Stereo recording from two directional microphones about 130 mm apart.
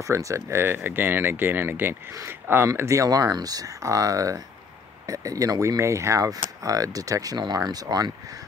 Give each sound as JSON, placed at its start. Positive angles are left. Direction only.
{"t": 0.0, "sound": "speech", "side_deg": -25}